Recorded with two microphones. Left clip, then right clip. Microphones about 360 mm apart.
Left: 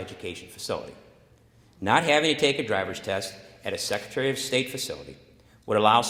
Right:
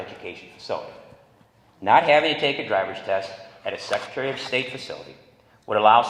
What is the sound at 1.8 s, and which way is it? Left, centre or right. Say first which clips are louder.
A man's voice: right 5 dB; left.